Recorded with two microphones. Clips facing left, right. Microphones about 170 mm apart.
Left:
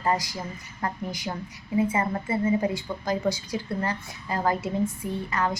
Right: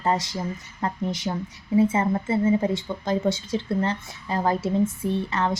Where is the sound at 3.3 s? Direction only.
25° right (ahead or behind).